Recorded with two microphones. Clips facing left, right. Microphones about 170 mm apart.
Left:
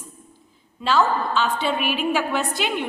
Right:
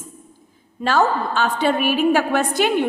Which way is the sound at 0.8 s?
50° right (ahead or behind).